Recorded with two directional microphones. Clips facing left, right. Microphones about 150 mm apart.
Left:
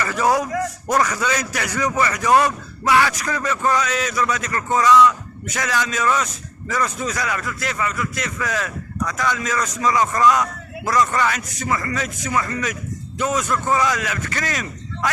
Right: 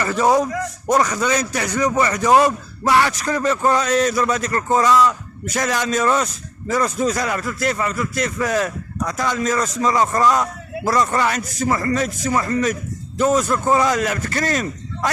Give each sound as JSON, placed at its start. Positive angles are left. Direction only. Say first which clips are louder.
{"t": 0.0, "sound": "a man's voice", "louder": "right 3 dB", "side_deg": -25}